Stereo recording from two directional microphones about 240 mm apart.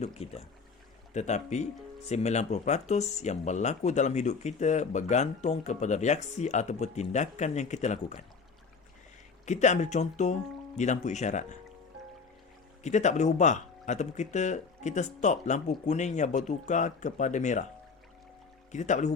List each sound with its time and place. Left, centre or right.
0.0 s speech: left
9.5 s speech: left
12.8 s speech: left
18.7 s speech: left